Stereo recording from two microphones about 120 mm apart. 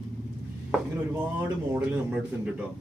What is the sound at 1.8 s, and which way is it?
Speech, 10° right (ahead or behind).